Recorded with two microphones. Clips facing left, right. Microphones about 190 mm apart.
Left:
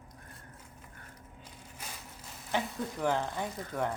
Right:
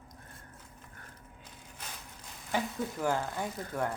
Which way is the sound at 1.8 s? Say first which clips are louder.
Even; 10° left (ahead or behind).